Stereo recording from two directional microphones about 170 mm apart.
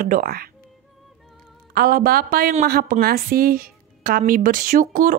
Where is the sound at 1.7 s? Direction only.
60° right (ahead or behind).